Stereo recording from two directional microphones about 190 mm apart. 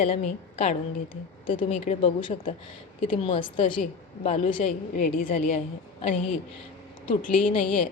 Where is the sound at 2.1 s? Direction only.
25° left (ahead or behind); by 5.3 s 50° left (ahead or behind).